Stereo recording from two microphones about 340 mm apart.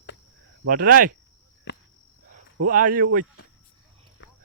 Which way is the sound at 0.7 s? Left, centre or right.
Right.